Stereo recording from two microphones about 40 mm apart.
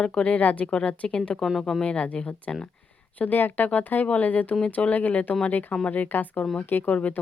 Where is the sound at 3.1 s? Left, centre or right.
Left.